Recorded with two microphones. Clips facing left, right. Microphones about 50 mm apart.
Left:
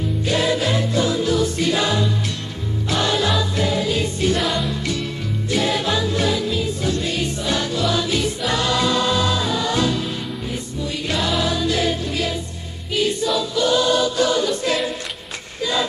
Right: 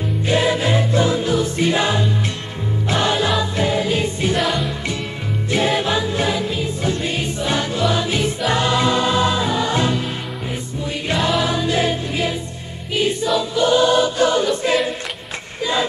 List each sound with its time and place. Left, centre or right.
0.2 s music: right
4.4 s music: centre
5.5 s music: right
11.4 s music: right
12.9 s choir: right